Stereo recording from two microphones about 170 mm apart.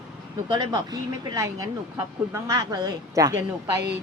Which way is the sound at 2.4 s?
20° right (ahead or behind).